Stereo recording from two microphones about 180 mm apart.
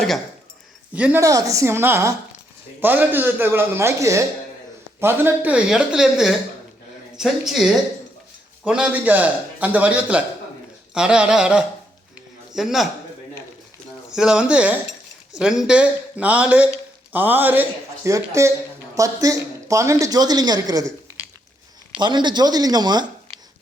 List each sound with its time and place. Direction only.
0.9 s a man's voice: 10° right (ahead or behind)
1.2 s a man's voice: 20° right (ahead or behind); by 12.9 s centre (ahead or behind)
14.1 s a man's voice: 5° right (ahead or behind); by 20.9 s 20° right (ahead or behind)
21.9 s a woman's voice: 25° right (ahead or behind)